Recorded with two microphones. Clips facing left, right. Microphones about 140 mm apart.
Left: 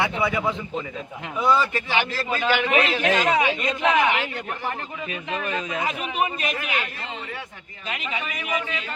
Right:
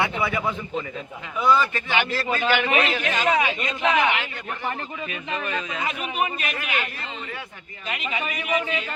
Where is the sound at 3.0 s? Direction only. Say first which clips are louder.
Left 2 dB; 25° left (ahead or behind).